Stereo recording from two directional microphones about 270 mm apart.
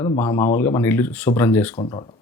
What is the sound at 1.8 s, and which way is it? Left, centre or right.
Speech, centre.